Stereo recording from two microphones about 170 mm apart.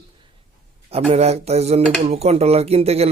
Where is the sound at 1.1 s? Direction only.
40° right (ahead or behind).